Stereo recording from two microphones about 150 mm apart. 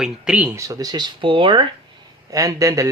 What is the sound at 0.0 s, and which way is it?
Speech, 10° right (ahead or behind).